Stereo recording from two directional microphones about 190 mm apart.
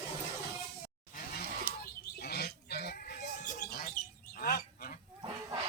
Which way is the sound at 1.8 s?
55° left (ahead or behind).